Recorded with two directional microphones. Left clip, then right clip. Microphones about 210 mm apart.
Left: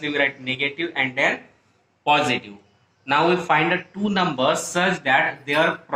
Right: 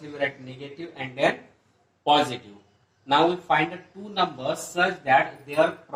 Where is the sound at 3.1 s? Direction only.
40° left (ahead or behind).